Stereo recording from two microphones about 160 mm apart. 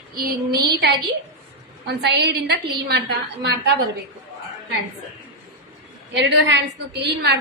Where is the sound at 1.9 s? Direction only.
90° right.